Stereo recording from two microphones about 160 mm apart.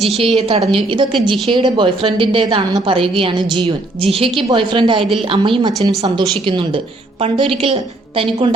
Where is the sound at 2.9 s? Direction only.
35° right (ahead or behind).